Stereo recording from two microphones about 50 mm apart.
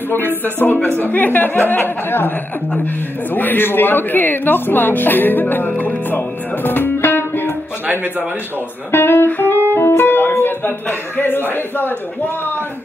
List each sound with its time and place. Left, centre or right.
0.6 s speech: left
5.8 s music: left
7.8 s speech: right
8.9 s speech: left
9.7 s music: left
10.4 s a man's voice: left